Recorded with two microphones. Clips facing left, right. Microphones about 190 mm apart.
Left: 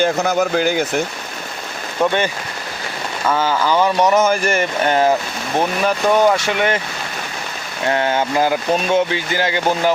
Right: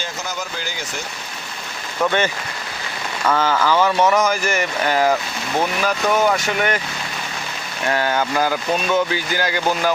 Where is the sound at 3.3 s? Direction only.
10° left (ahead or behind).